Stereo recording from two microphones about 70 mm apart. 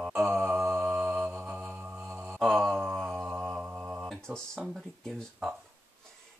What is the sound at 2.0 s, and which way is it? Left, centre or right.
Mantra, right.